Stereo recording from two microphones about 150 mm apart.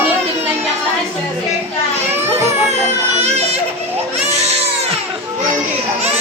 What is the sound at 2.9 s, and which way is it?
Speech, 45° right (ahead or behind).